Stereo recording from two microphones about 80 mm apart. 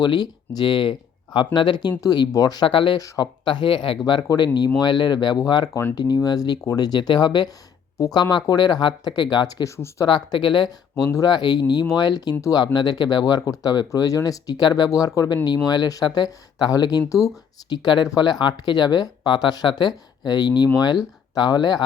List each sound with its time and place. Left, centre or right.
0.0 s speech: left
2.6 s speech: left
3.0 s speech: left
9.6 s speech: left
10.1 s speech: left
10.9 s speech: left
17.7 s speech: left